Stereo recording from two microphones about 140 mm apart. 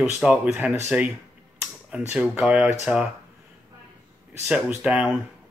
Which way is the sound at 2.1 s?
5° right (ahead or behind).